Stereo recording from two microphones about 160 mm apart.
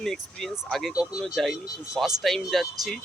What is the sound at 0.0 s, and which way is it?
Speech, centre (ahead or behind).